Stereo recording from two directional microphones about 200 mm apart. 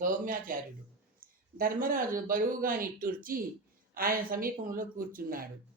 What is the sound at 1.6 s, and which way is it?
Speech, 45° right (ahead or behind).